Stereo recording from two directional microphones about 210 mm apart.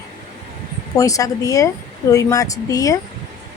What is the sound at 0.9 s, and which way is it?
Speech, 15° left (ahead or behind).